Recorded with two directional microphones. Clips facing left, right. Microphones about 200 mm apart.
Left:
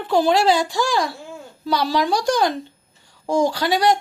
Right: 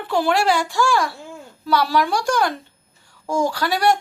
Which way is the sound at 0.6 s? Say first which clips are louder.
Right 1 dB; 35° left (ahead or behind).